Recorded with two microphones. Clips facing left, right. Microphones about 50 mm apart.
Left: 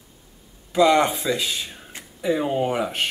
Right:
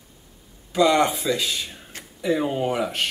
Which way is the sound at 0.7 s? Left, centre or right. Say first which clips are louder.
Left 1 dB; centre.